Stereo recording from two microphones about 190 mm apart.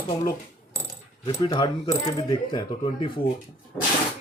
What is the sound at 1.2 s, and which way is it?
Speech, 20° left (ahead or behind).